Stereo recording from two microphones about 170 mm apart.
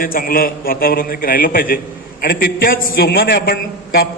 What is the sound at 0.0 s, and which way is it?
A man's voice, 60° left (ahead or behind).